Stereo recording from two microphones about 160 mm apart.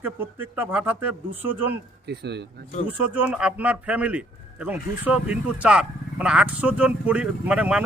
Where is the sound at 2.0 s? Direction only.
90° right.